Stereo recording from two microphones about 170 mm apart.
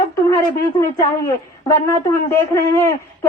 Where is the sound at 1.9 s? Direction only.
15° left (ahead or behind).